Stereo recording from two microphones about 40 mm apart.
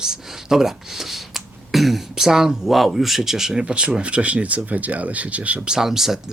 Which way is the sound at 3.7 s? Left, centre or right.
Right.